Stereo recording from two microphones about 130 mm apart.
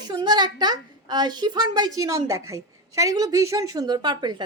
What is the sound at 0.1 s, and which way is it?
A woman's voice, 35° right (ahead or behind).